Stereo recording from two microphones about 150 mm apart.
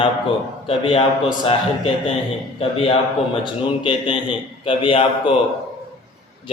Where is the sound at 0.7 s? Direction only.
40° left (ahead or behind).